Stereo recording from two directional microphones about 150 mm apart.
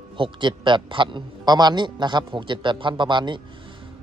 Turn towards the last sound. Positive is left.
turn(degrees=-30)  # may be behind; listen again after turning